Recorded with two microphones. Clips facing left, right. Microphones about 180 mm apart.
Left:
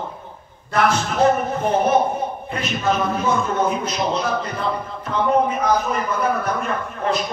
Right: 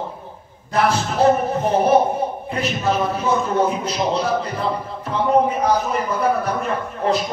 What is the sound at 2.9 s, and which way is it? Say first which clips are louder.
Speech: even; 30° right (ahead or behind).